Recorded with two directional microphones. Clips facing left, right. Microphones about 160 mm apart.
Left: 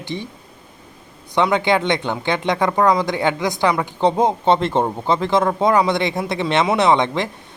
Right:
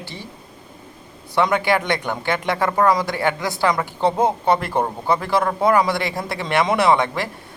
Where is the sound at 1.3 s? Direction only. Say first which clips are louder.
Left 1 dB; 20° left (ahead or behind).